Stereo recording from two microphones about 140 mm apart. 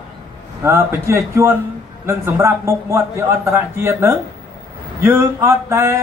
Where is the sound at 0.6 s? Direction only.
20° right (ahead or behind).